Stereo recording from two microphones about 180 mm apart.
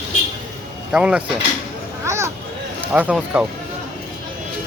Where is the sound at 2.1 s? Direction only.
15° right (ahead or behind).